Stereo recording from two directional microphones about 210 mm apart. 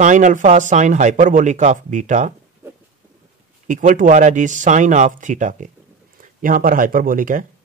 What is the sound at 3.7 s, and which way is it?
Speech, 35° right (ahead or behind).